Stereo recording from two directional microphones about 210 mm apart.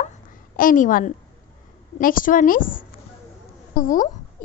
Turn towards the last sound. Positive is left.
turn(degrees=40)  # may be behind; listen again after turning